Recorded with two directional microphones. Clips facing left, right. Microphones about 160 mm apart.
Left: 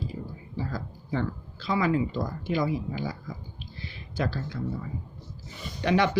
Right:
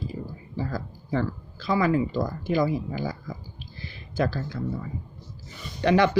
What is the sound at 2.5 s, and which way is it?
Speech, 45° right (ahead or behind).